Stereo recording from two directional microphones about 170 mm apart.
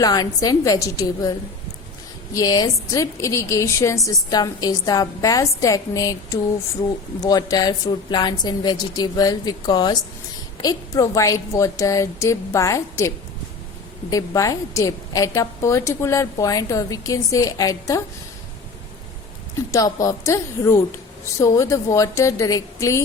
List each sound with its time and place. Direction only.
0.0 s a woman's voice: 20° left (ahead or behind)
2.3 s a woman's voice: 25° left (ahead or behind)
19.7 s a woman's voice: 20° left (ahead or behind)